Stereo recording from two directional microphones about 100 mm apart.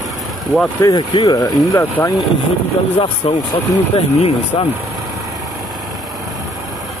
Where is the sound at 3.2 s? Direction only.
75° left (ahead or behind).